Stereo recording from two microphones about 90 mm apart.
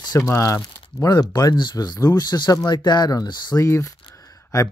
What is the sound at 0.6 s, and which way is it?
Speech, 45° left (ahead or behind).